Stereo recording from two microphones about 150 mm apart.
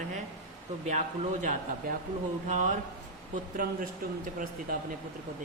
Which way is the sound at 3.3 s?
65° right (ahead or behind).